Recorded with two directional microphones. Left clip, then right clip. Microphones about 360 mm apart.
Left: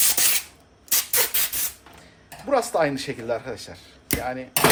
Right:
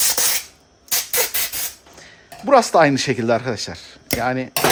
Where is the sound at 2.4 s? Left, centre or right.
Right.